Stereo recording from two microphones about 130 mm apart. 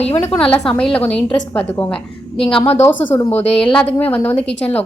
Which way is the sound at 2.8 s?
15° left (ahead or behind).